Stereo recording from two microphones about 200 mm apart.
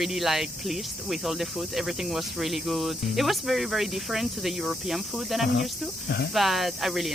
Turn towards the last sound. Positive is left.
turn(degrees=0)  # may be behind; listen again after turning